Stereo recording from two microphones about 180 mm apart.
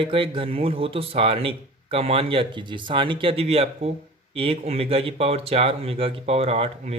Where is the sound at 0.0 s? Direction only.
30° right (ahead or behind).